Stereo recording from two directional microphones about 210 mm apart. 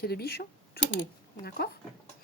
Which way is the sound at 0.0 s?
45° left (ahead or behind).